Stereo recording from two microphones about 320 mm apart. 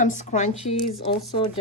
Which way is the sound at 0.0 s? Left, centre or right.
Left.